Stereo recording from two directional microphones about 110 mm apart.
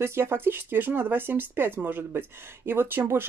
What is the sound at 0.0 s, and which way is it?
Speech, 20° right (ahead or behind).